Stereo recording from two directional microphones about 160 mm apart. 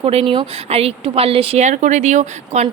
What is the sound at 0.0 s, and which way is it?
Speech, 40° right (ahead or behind).